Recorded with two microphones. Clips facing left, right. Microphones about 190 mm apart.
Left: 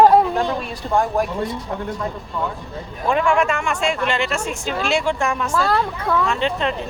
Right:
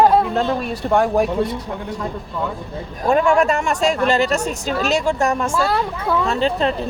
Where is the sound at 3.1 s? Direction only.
40° right (ahead or behind).